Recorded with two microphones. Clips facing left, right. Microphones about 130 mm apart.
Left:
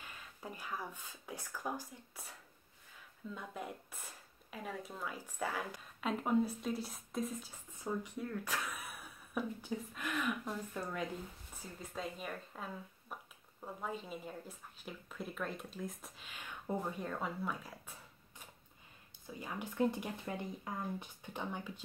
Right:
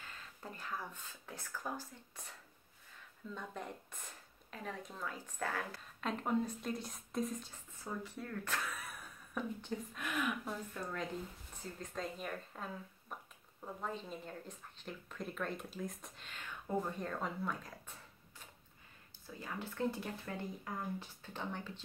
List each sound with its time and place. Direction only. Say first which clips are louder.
0.0 s speech: left 1 dB; 10° left (ahead or behind)
3.3 s speech: even; 5° left (ahead or behind)
7.7 s speech: left 4 dB; 15° left (ahead or behind); by 10.5 s centre (ahead or behind)
10.7 s speech: left 1 dB; 10° left (ahead or behind)
19.2 s speech: left 1 dB; 15° left (ahead or behind)